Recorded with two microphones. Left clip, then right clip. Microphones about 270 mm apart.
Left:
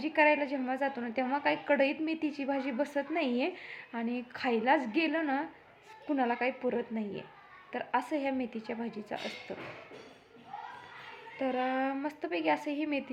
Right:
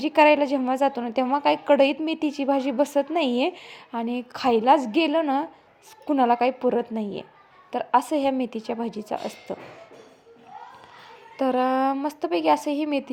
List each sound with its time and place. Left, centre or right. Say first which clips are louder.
0.0 s a woman's voice: right 9 dB; right
11.3 s a woman's voice: right 10 dB; right